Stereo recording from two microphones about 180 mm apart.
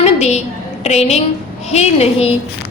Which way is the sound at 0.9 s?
35° left (ahead or behind).